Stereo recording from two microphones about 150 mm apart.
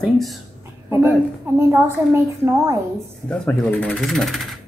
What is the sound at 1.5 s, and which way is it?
Speech, 20° right (ahead or behind).